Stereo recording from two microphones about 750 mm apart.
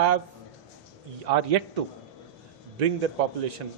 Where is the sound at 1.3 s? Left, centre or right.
Right.